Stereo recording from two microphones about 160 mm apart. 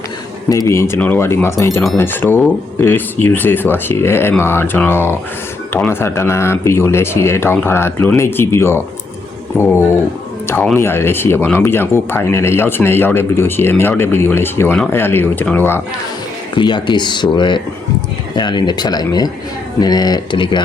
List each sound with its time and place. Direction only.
0.4 s speech: 20° left (ahead or behind)
16.6 s speech: 30° left (ahead or behind)